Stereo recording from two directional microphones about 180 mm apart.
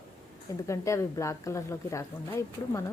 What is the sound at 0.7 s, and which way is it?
A woman's voice, 15° left (ahead or behind).